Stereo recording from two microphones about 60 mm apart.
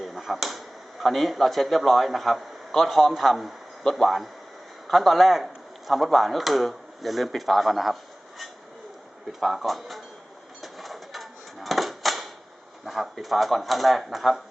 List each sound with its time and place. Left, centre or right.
0.0 s speech: centre
9.4 s speech: centre
10.6 s a sound: centre
12.8 s speech: centre